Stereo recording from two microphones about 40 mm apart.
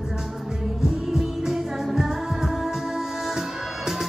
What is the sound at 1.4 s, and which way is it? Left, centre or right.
Music, centre.